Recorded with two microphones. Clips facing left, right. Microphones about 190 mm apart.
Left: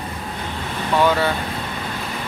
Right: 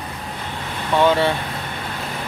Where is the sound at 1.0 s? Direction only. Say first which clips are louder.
Right 3 dB; 25° right (ahead or behind).